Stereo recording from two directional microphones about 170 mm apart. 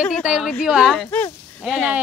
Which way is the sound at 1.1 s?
10° left (ahead or behind).